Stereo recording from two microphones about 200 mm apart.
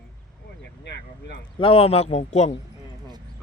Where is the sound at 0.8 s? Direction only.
60° left (ahead or behind).